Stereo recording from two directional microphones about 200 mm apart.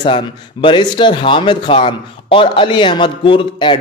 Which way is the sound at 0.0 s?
25° left (ahead or behind).